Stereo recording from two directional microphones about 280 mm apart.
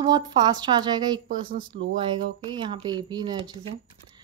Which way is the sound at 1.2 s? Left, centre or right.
Right.